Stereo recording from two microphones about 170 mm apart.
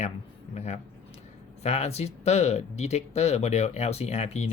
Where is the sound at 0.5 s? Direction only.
40° left (ahead or behind).